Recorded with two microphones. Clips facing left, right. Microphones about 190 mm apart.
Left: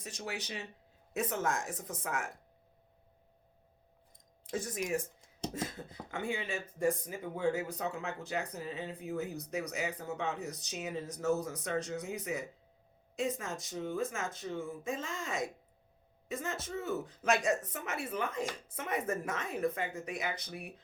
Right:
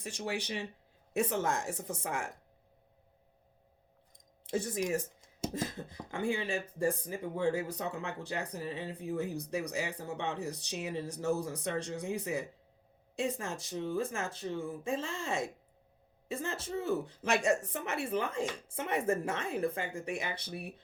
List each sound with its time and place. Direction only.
0.0 s speech: 30° right (ahead or behind)
4.4 s speech: 30° right (ahead or behind)
5.5 s a sound: 30° right (ahead or behind)
6.1 s speech: 30° right (ahead or behind)